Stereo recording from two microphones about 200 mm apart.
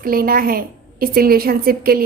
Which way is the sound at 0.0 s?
45° right (ahead or behind).